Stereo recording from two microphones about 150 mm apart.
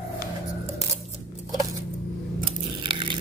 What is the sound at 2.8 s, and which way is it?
Crumpling, 35° right (ahead or behind).